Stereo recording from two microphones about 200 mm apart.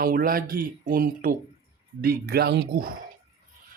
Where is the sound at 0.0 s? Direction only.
45° right (ahead or behind).